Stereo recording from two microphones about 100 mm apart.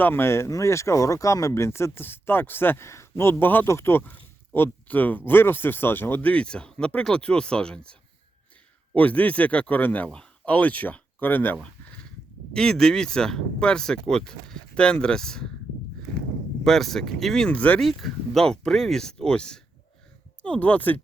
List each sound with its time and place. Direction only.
0.0 s speech: 25° left (ahead or behind)
9.0 s speech: 15° left (ahead or behind)
16.6 s speech: 5° left (ahead or behind)
17.7 s speech: centre (ahead or behind)